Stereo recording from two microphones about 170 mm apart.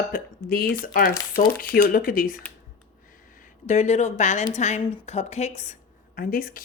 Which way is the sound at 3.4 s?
45° left (ahead or behind).